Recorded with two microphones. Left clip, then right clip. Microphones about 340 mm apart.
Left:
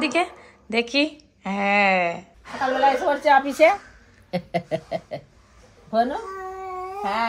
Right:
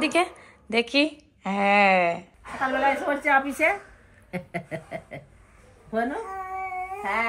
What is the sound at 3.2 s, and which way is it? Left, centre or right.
Speech, left.